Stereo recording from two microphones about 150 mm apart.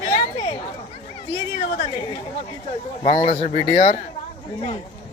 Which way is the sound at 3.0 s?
40° left (ahead or behind).